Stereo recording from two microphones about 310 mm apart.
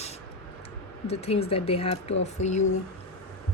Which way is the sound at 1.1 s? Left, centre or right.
Centre.